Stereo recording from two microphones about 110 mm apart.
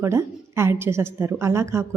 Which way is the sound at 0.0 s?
25° right (ahead or behind).